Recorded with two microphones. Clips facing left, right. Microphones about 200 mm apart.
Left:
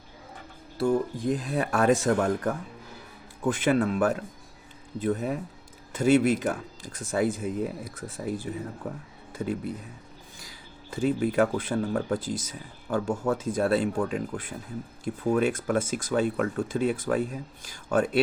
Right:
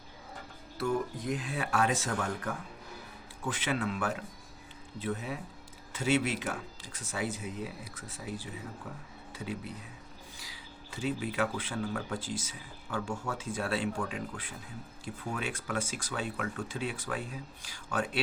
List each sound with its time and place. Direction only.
0.8 s speech: 30° left (ahead or behind); by 9.7 s 50° left (ahead or behind)
10.9 s speech: 50° left (ahead or behind)